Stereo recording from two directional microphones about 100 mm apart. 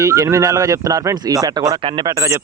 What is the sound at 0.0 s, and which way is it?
Speech, 30° right (ahead or behind).